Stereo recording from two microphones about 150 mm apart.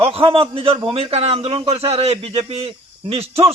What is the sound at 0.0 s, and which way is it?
A man's voice, 40° right (ahead or behind).